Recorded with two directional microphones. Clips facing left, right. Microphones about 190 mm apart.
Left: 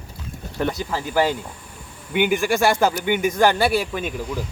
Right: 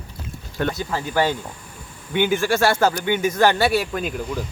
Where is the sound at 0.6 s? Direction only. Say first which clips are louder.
Even; 5° left (ahead or behind).